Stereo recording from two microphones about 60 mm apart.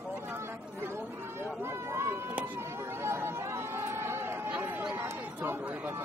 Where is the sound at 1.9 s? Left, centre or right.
Right.